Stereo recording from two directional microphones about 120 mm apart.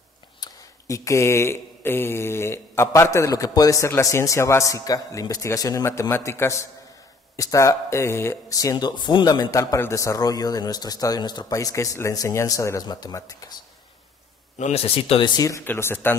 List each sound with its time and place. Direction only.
0.4 s speech: 25° left (ahead or behind)
14.6 s speech: 60° left (ahead or behind); by 15.4 s 40° left (ahead or behind)
15.4 s speech: 20° left (ahead or behind)